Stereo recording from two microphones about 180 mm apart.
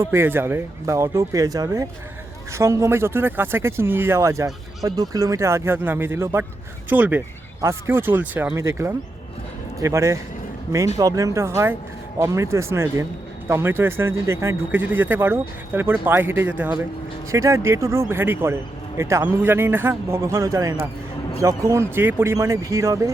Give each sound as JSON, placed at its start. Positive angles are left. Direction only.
{"t": 0.0, "sound": "speech", "side_deg": -15}